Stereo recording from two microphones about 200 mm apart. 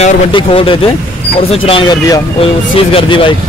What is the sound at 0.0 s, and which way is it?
Speech, 25° left (ahead or behind).